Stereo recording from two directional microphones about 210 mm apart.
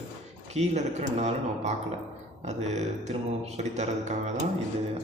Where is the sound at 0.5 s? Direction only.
30° right (ahead or behind).